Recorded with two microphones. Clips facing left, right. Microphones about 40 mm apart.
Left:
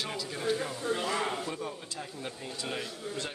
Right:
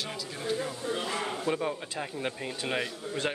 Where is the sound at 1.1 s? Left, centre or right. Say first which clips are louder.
Left 1 dB; centre.